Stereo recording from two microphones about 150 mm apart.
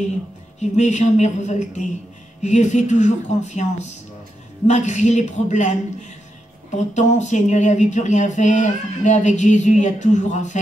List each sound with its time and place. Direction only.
0.6 s speech: 50° left (ahead or behind)